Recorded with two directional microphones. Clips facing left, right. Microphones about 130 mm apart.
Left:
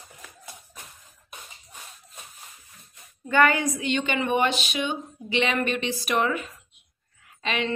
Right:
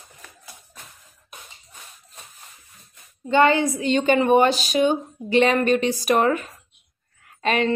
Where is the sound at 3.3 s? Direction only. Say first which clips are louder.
Right 4 dB; 25° right (ahead or behind).